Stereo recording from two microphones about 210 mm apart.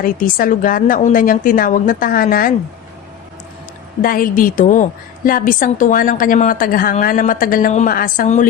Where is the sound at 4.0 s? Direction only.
45° left (ahead or behind).